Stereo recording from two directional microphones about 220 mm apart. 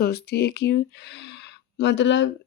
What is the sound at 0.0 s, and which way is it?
Speech, 45° left (ahead or behind).